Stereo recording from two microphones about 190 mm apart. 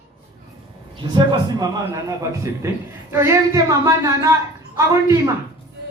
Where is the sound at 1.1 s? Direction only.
20° right (ahead or behind).